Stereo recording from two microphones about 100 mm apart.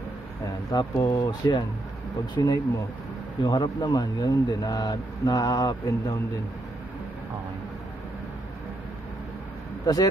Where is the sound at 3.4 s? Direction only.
40° left (ahead or behind).